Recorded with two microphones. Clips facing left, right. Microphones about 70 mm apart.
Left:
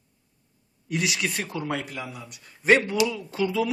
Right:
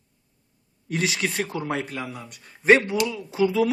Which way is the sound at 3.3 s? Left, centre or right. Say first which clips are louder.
Right 4 dB; centre.